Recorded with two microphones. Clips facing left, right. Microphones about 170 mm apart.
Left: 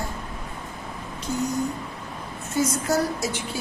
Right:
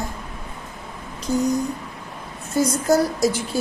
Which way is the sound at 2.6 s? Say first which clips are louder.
Right 5 dB; 40° right (ahead or behind).